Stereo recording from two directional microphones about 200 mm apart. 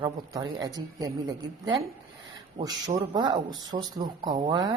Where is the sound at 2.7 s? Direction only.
20° right (ahead or behind).